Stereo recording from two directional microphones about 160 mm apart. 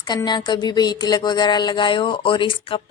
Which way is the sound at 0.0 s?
25° left (ahead or behind).